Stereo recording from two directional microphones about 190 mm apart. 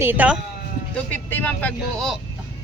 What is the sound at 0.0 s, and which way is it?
Speech, 10° right (ahead or behind).